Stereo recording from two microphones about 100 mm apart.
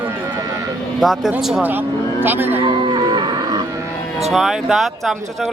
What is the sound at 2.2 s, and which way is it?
Speech, 20° right (ahead or behind).